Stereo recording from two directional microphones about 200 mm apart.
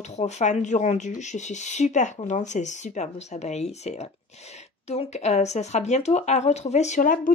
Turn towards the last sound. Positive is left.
turn(degrees=40)  # may be behind; listen again after turning